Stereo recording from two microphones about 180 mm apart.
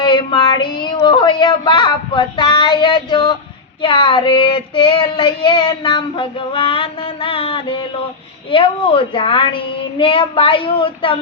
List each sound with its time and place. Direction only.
0.0 s a woman's voice: 25° left (ahead or behind)
3.8 s child singing: 25° left (ahead or behind)